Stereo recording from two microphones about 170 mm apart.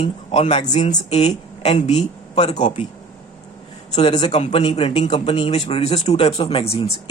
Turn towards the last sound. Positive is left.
turn(degrees=35)  # may be behind; listen again after turning